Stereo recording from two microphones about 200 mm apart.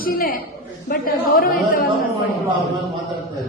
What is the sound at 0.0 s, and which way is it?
Speech, 45° left (ahead or behind).